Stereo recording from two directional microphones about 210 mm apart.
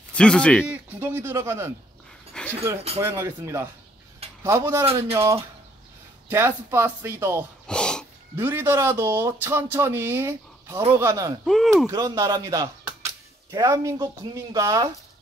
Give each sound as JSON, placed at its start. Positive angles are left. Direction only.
{"t": 0.1, "sound": "speech", "side_deg": 5}
{"t": 0.7, "sound": "speech", "side_deg": -10}
{"t": 2.4, "sound": "dog", "side_deg": 5}
{"t": 3.0, "sound": "speech", "side_deg": -10}
{"t": 7.6, "sound": "a sound", "side_deg": 5}
{"t": 8.4, "sound": "speech", "side_deg": -10}
{"t": 11.4, "sound": "speech", "side_deg": 0}
{"t": 11.9, "sound": "speech", "side_deg": -15}